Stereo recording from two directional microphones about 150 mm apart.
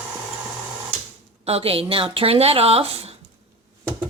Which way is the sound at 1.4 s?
40° right (ahead or behind).